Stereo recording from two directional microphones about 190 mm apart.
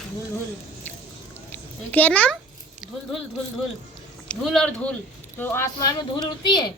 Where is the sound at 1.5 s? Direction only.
10° left (ahead or behind).